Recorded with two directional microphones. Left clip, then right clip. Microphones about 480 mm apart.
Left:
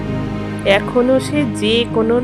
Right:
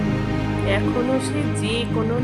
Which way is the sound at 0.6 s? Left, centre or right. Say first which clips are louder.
Left 10 dB; centre.